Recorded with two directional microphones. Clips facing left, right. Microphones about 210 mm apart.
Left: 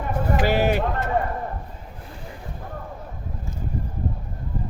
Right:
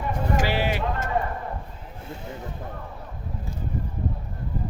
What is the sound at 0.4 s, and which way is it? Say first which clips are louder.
Speech: left 5 dB; 45° left (ahead or behind).